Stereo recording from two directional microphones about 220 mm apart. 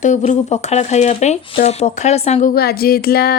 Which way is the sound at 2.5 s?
45° left (ahead or behind).